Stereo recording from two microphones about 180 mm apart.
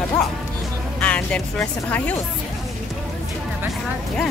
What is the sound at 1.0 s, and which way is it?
Speech, 5° left (ahead or behind).